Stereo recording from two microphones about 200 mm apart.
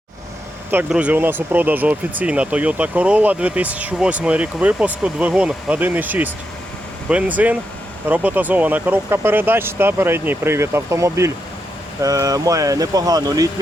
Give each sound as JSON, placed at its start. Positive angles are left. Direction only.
{"t": 0.7, "sound": "speech", "side_deg": -10}